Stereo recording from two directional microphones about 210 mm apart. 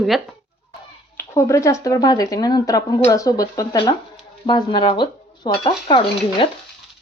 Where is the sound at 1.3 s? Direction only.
15° left (ahead or behind).